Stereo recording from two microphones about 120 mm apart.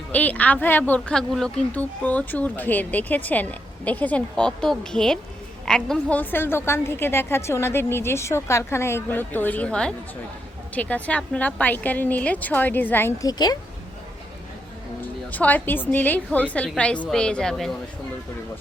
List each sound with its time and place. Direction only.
0.1 s a woman's voice: 15° left (ahead or behind)
13.2 s speech: 35° left (ahead or behind)
15.0 s speech: 15° left (ahead or behind)